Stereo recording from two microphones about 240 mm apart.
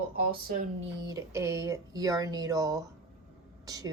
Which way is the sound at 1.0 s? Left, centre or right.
Centre.